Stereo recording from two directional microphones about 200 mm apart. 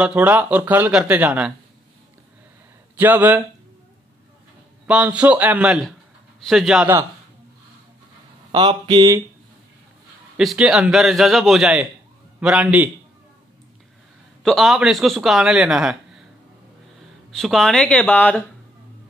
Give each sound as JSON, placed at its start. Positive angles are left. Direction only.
{"t": 0.0, "sound": "speech", "side_deg": -5}
{"t": 3.0, "sound": "speech", "side_deg": -10}
{"t": 4.8, "sound": "speech", "side_deg": -5}
{"t": 8.5, "sound": "speech", "side_deg": -25}
{"t": 10.3, "sound": "speech", "side_deg": 0}
{"t": 14.4, "sound": "speech", "side_deg": 0}
{"t": 17.4, "sound": "speech", "side_deg": 0}